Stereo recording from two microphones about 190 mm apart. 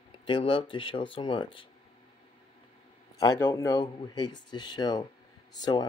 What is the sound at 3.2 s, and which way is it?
Speech, 15° left (ahead or behind).